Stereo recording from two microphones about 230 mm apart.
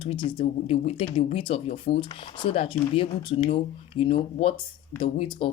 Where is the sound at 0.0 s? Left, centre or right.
Left.